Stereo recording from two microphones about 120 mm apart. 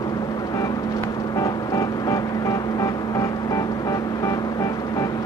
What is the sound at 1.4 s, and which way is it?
Vehicle, 30° left (ahead or behind).